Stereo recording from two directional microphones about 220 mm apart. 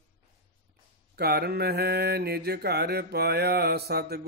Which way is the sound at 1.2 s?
45° right (ahead or behind).